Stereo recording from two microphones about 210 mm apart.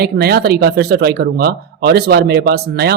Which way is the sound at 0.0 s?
50° right (ahead or behind).